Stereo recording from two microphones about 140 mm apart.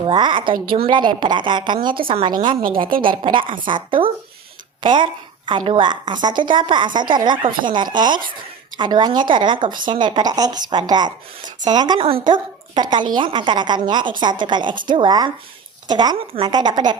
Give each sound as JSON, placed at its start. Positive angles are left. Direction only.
{"t": 0.1, "sound": "speech", "side_deg": -35}